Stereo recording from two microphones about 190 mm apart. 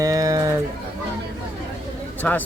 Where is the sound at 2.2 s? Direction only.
10° left (ahead or behind).